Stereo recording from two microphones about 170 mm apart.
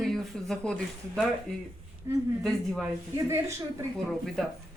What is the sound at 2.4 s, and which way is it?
Speech, centre (ahead or behind).